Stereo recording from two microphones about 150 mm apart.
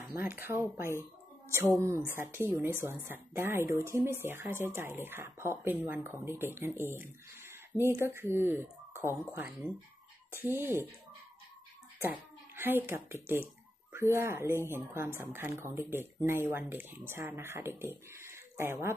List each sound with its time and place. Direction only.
0.1 s speech: 15° right (ahead or behind)
10.3 s speech: 15° right (ahead or behind)
12.5 s speech: 15° right (ahead or behind)
18.1 s a sound: 20° right (ahead or behind)